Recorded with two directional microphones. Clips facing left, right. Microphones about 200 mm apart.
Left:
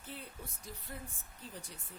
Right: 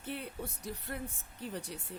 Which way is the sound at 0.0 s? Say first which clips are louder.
Right 8 dB; 70° right (ahead or behind).